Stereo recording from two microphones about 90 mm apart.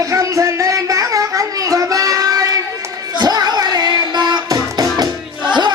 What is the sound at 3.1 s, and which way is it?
Music, 50° right (ahead or behind).